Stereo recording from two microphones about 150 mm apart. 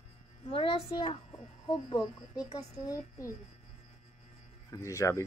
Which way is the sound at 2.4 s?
25° left (ahead or behind).